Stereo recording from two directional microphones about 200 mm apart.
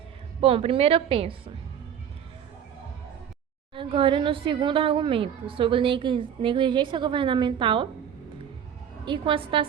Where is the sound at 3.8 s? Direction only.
25° right (ahead or behind).